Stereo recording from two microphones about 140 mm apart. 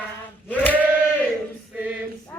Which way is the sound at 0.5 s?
10° left (ahead or behind).